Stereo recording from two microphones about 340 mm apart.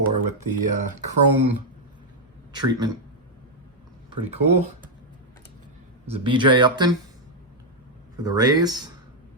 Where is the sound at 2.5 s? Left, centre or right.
Centre.